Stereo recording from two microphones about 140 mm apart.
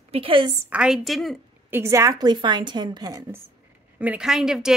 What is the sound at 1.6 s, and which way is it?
A woman's voice, 20° right (ahead or behind).